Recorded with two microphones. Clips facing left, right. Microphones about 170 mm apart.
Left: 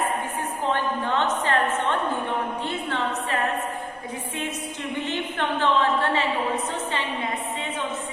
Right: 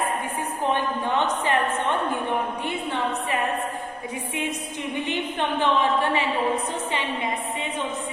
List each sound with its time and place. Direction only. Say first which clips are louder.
0.6 s a woman's voice: right 1 dB; 15° right (ahead or behind)
4.9 s a woman's voice: right 1 dB; 15° right (ahead or behind)